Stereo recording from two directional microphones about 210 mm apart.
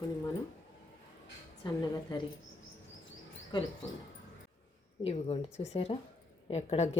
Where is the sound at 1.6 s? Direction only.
20° left (ahead or behind).